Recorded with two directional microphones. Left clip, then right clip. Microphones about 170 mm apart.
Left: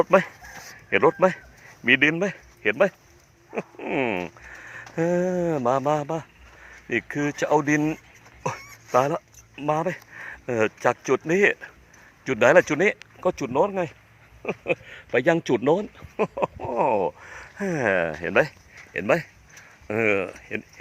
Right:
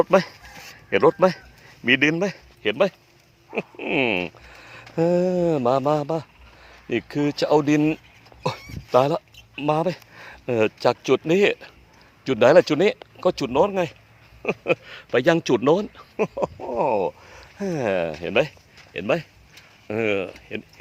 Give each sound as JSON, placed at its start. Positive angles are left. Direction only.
{"t": 0.0, "sound": "a man's voice", "side_deg": -15}
{"t": 13.4, "sound": "a man's voice", "side_deg": -15}
{"t": 16.6, "sound": "speech", "side_deg": 5}
{"t": 18.9, "sound": "speech", "side_deg": 20}